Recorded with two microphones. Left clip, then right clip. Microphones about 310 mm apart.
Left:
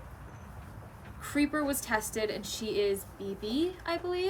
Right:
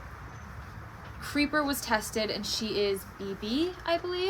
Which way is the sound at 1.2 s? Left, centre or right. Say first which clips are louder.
Right 2 dB; centre.